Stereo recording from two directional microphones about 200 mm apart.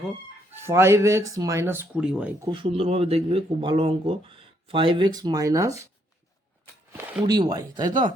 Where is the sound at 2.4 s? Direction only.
25° right (ahead or behind).